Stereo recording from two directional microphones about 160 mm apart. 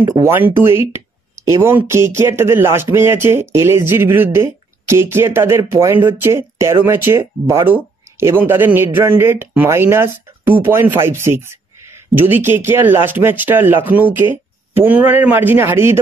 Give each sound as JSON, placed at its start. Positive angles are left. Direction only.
{"t": 0.0, "sound": "speech", "side_deg": -15}